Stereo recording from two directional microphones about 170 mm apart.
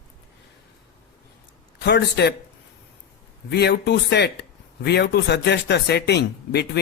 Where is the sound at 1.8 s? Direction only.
80° left.